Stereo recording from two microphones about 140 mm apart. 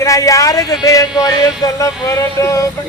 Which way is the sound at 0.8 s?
25° left (ahead or behind).